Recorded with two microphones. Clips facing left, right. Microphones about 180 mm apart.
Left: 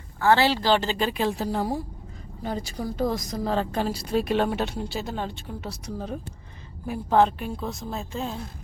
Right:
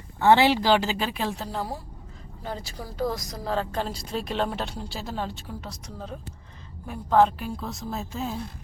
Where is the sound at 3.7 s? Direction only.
10° left (ahead or behind).